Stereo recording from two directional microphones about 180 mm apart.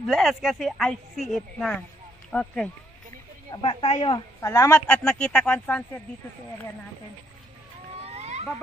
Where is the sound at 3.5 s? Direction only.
25° left (ahead or behind); by 6.0 s 10° left (ahead or behind).